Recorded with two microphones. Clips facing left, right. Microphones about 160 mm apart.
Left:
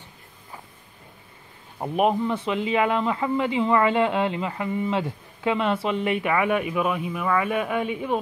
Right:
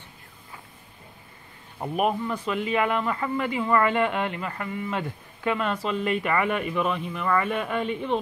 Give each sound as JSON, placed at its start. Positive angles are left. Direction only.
{"t": 1.8, "sound": "speech", "side_deg": 20}
{"t": 2.5, "sound": "speech", "side_deg": 5}
{"t": 3.1, "sound": "a man's voice", "side_deg": 15}
{"t": 5.0, "sound": "a man's voice", "side_deg": 5}